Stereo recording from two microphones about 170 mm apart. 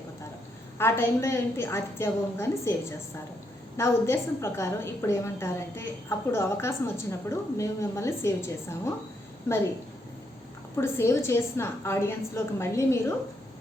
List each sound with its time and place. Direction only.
0.8 s a woman's voice: 15° left (ahead or behind)
3.8 s a woman's voice: 15° left (ahead or behind)
10.8 s a woman's voice: 15° left (ahead or behind)